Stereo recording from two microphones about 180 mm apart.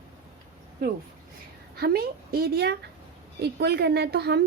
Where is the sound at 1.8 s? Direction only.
60° right (ahead or behind).